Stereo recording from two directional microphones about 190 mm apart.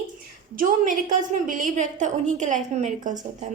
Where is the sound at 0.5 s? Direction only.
45° right (ahead or behind).